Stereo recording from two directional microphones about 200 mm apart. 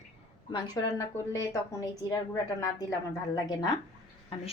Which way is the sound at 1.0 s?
15° left (ahead or behind).